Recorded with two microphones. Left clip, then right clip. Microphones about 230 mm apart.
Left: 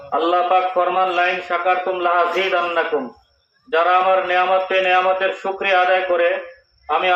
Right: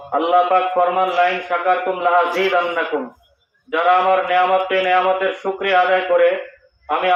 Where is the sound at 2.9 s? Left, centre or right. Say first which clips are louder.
Left 1 dB; left.